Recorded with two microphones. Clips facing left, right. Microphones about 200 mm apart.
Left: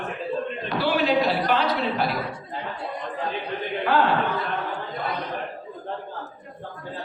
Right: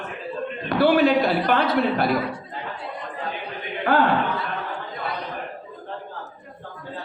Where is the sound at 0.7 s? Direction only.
55° right (ahead or behind).